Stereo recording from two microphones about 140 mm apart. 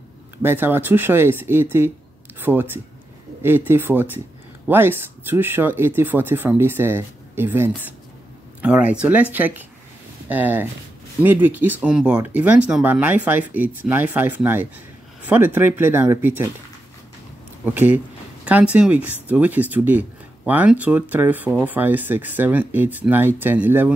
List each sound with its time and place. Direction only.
0.4 s speech: 15° right (ahead or behind)
17.6 s speech: 10° right (ahead or behind)